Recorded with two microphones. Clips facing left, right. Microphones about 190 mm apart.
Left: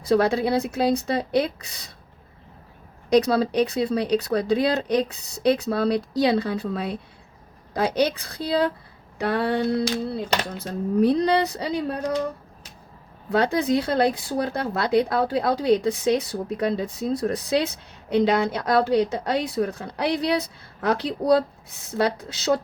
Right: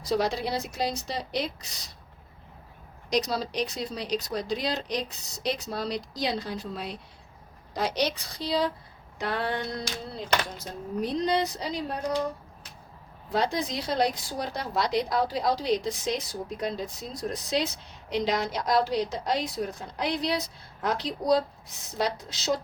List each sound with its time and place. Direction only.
0.0 s speech: 55° left (ahead or behind)
3.2 s speech: 60° left (ahead or behind)
7.7 s speech: 55° left (ahead or behind)
9.8 s speech: 65° left (ahead or behind)
13.3 s speech: 60° left (ahead or behind)